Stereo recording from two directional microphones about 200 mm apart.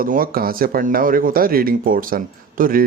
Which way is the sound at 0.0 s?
45° right (ahead or behind).